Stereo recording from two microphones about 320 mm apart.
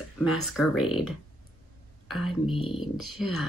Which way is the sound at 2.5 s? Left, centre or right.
Centre.